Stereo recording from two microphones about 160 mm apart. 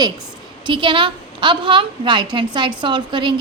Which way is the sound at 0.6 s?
30° right (ahead or behind).